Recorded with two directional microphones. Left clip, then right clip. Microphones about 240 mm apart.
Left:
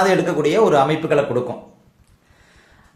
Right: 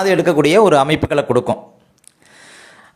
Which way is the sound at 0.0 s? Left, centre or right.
Right.